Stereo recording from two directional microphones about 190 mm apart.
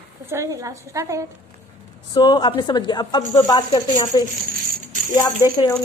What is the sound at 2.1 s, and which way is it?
Speech, 25° left (ahead or behind).